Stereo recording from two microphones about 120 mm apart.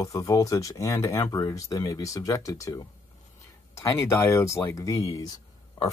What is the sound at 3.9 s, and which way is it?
Speech, 25° left (ahead or behind).